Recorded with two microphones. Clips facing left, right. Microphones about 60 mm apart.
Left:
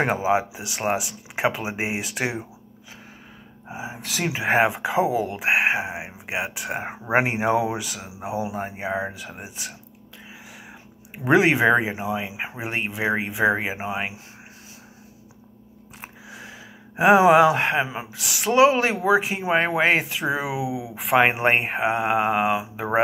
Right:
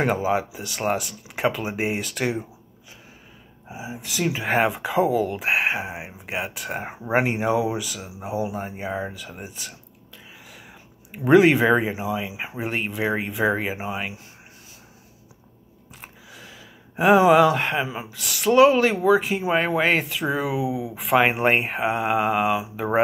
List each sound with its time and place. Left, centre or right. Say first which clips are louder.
0.0 s speech: left 1 dB; left
3.7 s speech: left 1 dB; left
4.3 s speech: left 2 dB; centre
7.4 s speech: left 1 dB; left
11.2 s speech: right 2 dB; centre
16.0 s a sound: left 4 dB; centre
17.8 s speech: even; centre